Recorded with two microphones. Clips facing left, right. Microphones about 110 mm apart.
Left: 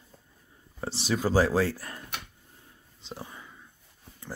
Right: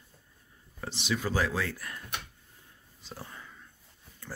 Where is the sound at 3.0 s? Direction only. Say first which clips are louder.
Left 3 dB; 15° left (ahead or behind).